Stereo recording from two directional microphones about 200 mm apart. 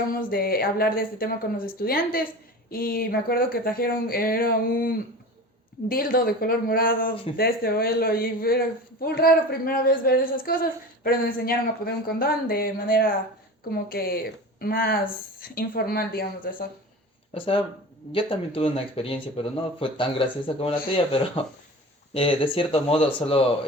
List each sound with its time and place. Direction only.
0.1 s speech: 45° left (ahead or behind)
17.3 s speech: 25° left (ahead or behind)